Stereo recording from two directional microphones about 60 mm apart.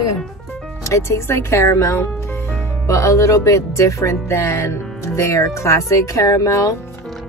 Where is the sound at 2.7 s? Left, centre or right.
Left.